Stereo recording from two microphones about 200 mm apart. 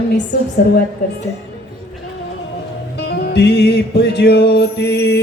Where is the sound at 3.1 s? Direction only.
55° left (ahead or behind).